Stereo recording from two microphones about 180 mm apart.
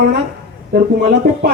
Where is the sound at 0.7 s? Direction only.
55° right (ahead or behind).